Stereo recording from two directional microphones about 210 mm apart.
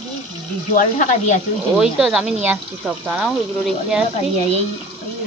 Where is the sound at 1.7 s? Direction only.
5° right (ahead or behind).